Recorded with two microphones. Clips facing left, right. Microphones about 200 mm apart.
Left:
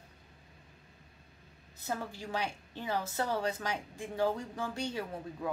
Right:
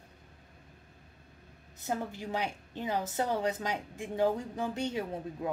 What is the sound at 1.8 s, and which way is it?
A woman's voice, 20° right (ahead or behind).